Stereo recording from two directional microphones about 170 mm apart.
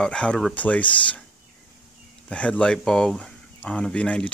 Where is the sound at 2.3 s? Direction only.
5° left (ahead or behind).